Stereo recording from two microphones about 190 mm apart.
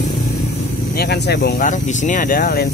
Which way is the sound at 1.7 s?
40° left (ahead or behind).